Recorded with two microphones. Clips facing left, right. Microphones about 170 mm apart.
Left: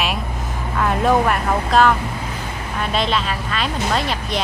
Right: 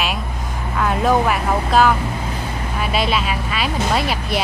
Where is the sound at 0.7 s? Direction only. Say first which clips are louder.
Even; centre (ahead or behind).